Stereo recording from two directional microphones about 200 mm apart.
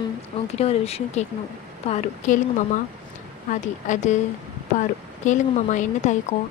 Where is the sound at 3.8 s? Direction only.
35° left (ahead or behind).